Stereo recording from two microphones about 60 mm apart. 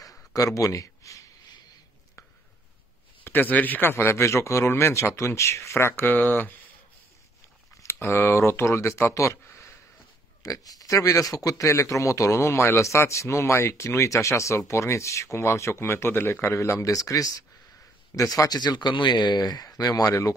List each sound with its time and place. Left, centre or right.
0.0 s a sound: left
3.3 s a man's voice: left
3.9 s speech: left
7.8 s speech: left
10.4 s speech: left
19.3 s speech: left